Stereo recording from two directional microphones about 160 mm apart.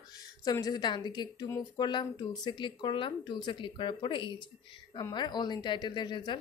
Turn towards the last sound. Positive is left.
turn(degrees=30)  # may be behind; listen again after turning